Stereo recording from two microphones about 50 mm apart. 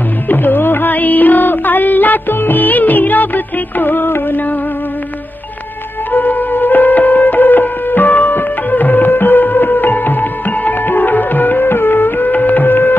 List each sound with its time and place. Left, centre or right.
0.3 s music: left
6.1 s music: left
12.4 s a sound: left